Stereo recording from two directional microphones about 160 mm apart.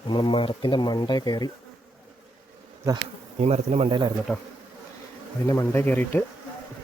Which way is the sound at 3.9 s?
30° right (ahead or behind).